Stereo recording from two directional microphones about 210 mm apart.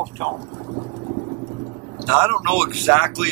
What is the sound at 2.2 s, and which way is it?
Speech, 10° right (ahead or behind).